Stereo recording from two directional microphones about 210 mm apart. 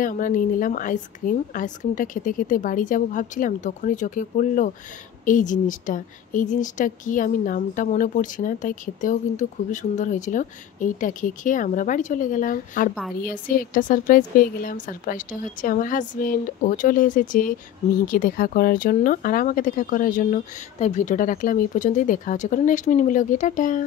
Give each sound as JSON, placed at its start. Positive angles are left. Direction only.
{"t": 0.0, "sound": "a woman's voice", "side_deg": 40}